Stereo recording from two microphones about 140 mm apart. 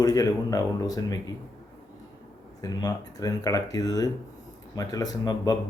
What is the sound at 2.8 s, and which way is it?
Speech, 25° left (ahead or behind).